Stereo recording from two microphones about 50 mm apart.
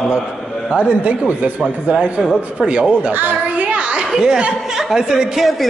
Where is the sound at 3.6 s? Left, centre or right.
Right.